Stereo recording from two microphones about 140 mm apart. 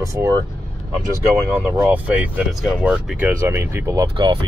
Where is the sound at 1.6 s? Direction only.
15° right (ahead or behind).